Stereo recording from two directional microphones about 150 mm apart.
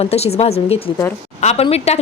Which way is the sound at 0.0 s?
45° left (ahead or behind).